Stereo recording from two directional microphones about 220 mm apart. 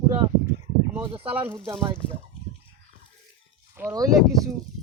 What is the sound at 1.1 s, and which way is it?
Speech, 25° right (ahead or behind).